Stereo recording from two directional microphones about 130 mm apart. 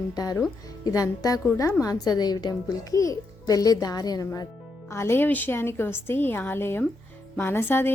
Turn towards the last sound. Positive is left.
turn(degrees=15)  # may be behind; listen again after turning